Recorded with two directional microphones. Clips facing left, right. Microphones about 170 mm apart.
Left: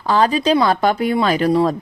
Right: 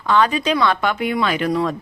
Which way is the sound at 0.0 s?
35° left (ahead or behind).